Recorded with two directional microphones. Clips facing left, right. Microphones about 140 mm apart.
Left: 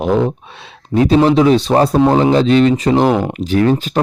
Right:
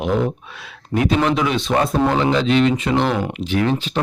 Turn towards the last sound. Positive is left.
turn(degrees=40)  # may be behind; listen again after turning